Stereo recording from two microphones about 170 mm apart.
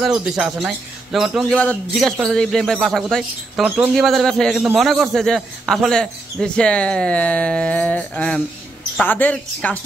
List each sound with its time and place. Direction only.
0.0 s a woman's voice: 5° right (ahead or behind)